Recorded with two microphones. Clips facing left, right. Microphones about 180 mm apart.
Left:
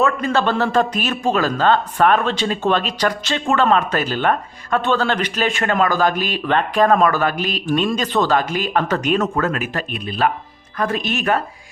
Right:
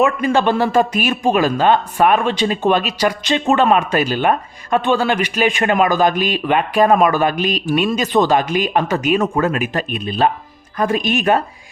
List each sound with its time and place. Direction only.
0.0 s a man's voice: 15° right (ahead or behind)